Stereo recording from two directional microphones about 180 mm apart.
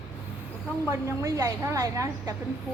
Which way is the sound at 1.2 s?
15° right (ahead or behind).